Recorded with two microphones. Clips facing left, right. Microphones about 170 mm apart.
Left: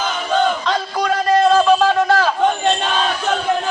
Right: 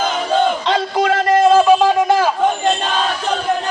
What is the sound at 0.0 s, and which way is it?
Battle cry, 30° right (ahead or behind).